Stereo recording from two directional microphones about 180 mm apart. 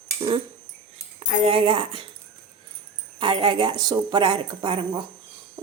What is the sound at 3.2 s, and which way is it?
Speech, 25° right (ahead or behind).